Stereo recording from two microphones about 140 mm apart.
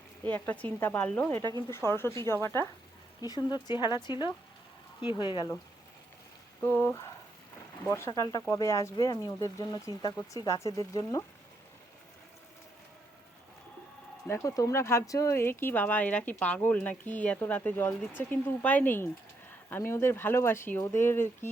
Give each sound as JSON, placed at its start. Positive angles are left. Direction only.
{"t": 0.3, "sound": "speech", "side_deg": 10}
{"t": 3.2, "sound": "speech", "side_deg": 30}
{"t": 6.6, "sound": "speech", "side_deg": 10}
{"t": 14.3, "sound": "speech", "side_deg": 20}